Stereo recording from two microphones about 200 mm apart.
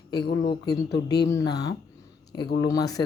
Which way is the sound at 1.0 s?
55° left (ahead or behind).